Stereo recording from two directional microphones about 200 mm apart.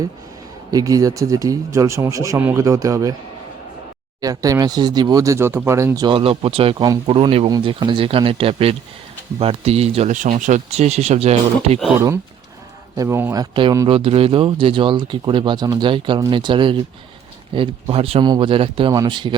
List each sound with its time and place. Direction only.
0.7 s speech: 15° right (ahead or behind)
4.2 s speech: 15° right (ahead or behind)
11.9 s speech: 15° right (ahead or behind)